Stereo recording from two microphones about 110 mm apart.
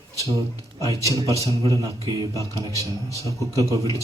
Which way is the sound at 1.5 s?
30° right (ahead or behind).